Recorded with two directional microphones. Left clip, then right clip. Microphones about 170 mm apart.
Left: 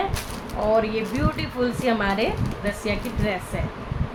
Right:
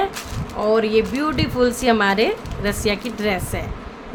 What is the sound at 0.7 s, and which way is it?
Speech, 60° right (ahead or behind).